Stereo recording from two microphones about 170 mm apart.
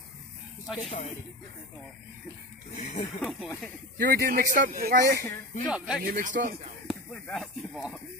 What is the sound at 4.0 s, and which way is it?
Speech, 60° right (ahead or behind).